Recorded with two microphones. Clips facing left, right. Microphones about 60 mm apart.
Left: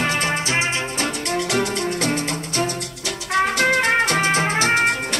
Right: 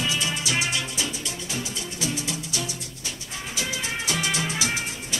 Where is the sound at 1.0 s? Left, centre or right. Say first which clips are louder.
Left 9 dB; left.